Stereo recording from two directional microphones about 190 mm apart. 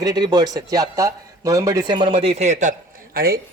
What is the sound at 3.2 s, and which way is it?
Speech, 50° right (ahead or behind).